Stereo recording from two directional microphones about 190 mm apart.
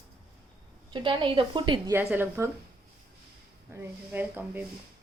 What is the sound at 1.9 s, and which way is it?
Speech, 10° right (ahead or behind).